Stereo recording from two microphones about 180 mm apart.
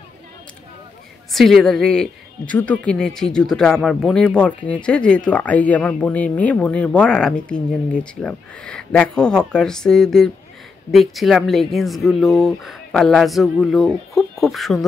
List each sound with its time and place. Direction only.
1.3 s speech: centre (ahead or behind)